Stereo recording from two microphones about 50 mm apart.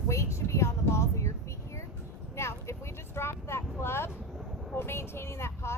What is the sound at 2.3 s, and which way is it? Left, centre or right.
Vehicle, left.